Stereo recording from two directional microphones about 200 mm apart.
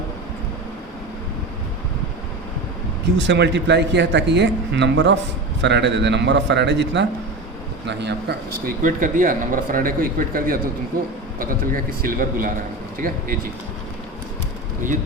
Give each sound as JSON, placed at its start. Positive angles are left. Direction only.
{"t": 3.2, "sound": "speech", "side_deg": -60}